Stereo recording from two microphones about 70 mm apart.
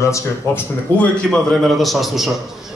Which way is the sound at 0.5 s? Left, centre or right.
Left.